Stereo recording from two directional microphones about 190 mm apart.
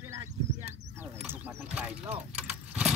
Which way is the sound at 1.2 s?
10° right (ahead or behind).